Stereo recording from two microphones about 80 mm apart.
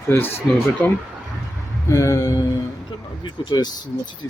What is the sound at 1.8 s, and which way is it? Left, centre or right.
Speech, left.